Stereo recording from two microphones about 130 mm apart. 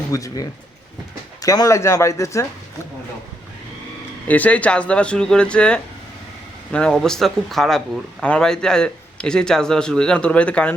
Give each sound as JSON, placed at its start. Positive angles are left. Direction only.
{"t": 0.1, "sound": "speech", "side_deg": 25}
{"t": 4.3, "sound": "a man's voice", "side_deg": 10}